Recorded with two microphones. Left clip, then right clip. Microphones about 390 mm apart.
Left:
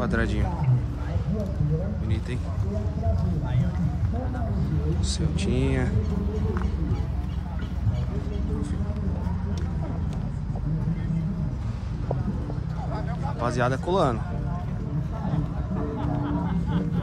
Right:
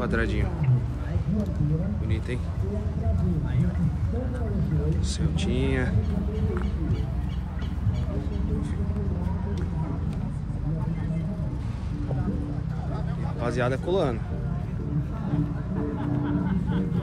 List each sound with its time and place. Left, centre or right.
0.0 s a man's voice: centre
5.3 s speech: centre
13.4 s speech: centre
16.0 s music: left